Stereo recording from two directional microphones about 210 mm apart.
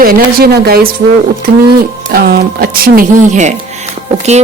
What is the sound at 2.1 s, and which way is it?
A woman's voice, 45° right (ahead or behind).